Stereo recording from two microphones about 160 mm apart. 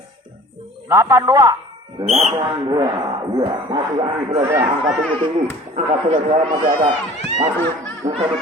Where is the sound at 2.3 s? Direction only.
30° right (ahead or behind).